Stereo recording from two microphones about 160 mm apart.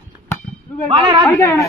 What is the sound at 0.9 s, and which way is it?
Speech, 30° right (ahead or behind).